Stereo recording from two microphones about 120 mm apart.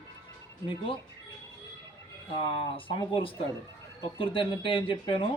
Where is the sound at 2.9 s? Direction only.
45° left (ahead or behind).